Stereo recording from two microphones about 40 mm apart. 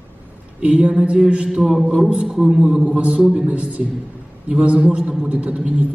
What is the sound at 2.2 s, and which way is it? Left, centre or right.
Speech, centre.